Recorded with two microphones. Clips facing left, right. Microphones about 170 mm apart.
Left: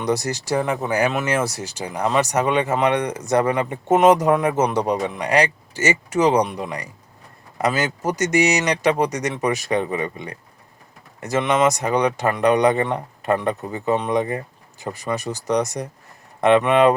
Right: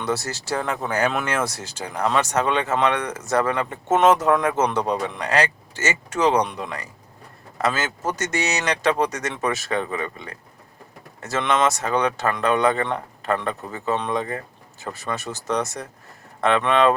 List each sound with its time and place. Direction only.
0.0 s speech: 15° left (ahead or behind)